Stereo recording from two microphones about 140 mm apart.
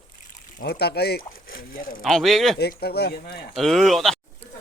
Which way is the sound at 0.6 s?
90° left.